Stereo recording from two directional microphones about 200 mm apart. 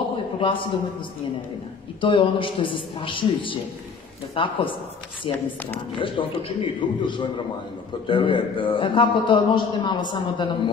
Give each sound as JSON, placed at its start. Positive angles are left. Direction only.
{"t": 0.4, "sound": "a man's voice", "side_deg": 25}
{"t": 2.0, "sound": "a man's voice", "side_deg": 25}
{"t": 5.9, "sound": "a man's voice", "side_deg": 25}